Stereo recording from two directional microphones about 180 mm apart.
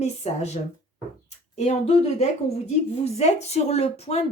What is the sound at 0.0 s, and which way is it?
Speech, 40° left (ahead or behind).